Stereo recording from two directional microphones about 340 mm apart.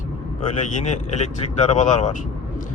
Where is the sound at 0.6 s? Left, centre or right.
Centre.